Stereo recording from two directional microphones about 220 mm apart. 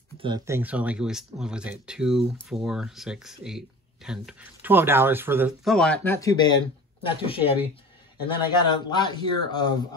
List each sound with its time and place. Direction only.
0.2 s speech: 20° right (ahead or behind)
0.6 s speech: 5° right (ahead or behind); by 9.8 s 20° left (ahead or behind)